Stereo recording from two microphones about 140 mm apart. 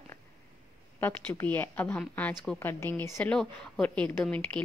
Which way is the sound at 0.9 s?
15° left (ahead or behind).